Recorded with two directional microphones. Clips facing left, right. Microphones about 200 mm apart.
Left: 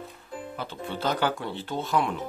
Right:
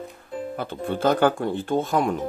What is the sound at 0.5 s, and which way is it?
Speech, 50° right (ahead or behind).